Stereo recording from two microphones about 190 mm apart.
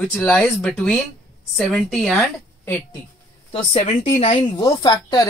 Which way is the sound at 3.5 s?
35° left (ahead or behind).